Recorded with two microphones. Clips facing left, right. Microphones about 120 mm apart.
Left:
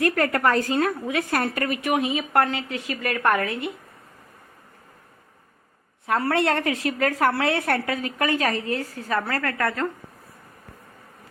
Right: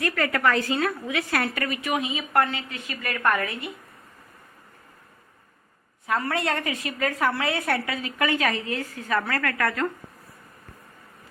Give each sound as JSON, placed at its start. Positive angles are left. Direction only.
{"t": 0.1, "sound": "a woman's voice", "side_deg": 45}
{"t": 3.3, "sound": "a woman's voice", "side_deg": 70}
{"t": 6.2, "sound": "a woman's voice", "side_deg": 65}
{"t": 7.3, "sound": "a woman's voice", "side_deg": 65}